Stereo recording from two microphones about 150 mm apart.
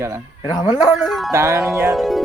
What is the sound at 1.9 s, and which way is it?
Speech, centre (ahead or behind).